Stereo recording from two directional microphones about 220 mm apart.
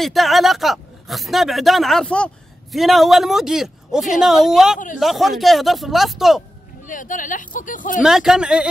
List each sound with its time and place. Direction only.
0.0 s speech: centre (ahead or behind)
6.9 s speech: 35° left (ahead or behind)
8.0 s speech: centre (ahead or behind)